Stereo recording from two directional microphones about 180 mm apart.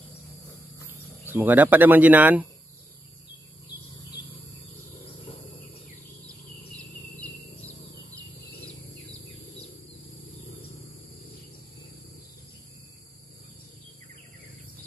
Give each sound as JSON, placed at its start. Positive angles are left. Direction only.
{"t": 0.8, "sound": "speech", "side_deg": -10}